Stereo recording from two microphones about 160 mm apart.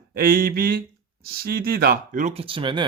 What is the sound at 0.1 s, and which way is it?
Speech, 65° right (ahead or behind).